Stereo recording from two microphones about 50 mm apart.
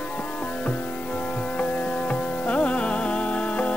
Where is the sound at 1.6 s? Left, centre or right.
Left.